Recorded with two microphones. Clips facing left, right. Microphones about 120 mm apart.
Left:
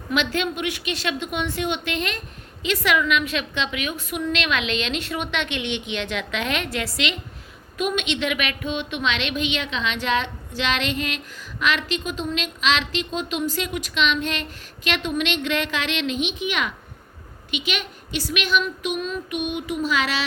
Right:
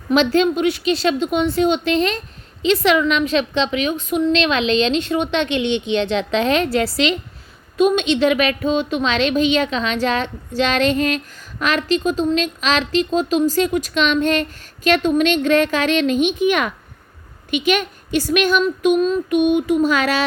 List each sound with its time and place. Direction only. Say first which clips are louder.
0.1 s a woman's voice: right 9 dB; 35° right (ahead or behind)
19.5 s a woman's voice: right 8 dB; 50° right (ahead or behind)